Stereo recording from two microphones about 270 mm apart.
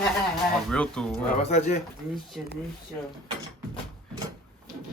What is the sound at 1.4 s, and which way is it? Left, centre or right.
Speech, left.